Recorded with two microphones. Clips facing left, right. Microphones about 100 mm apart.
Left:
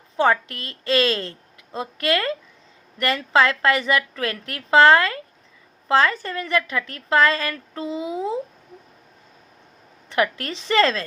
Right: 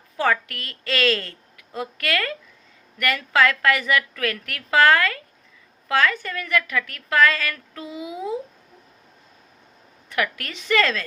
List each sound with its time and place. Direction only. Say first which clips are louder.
0.2 s a woman's voice: left 3 dB; 25° left (ahead or behind)
10.1 s a woman's voice: left 4 dB; 30° left (ahead or behind)